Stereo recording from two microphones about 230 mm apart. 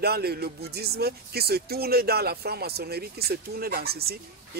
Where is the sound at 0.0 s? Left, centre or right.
Right.